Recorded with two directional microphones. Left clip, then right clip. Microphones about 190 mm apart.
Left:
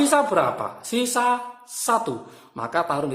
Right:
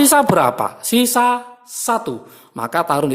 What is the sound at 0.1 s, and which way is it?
A woman's voice, 50° right (ahead or behind).